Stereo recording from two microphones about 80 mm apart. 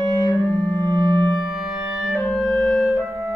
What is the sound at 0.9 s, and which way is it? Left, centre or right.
Music, right.